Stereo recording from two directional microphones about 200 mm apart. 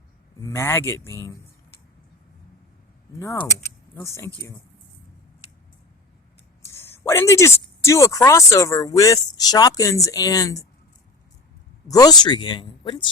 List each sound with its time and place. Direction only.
0.4 s speech: 15° left (ahead or behind)
3.2 s speech: 15° left (ahead or behind)
6.7 s speech: 10° left (ahead or behind)
11.9 s speech: 20° left (ahead or behind)